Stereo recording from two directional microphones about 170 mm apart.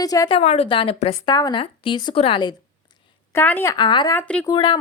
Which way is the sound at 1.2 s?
25° left (ahead or behind).